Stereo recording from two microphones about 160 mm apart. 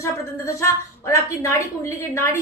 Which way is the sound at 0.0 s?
20° left (ahead or behind).